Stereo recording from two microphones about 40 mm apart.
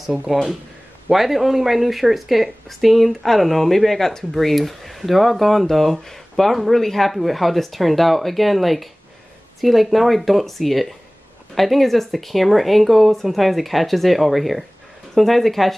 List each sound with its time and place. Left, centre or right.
0.3 s speech: centre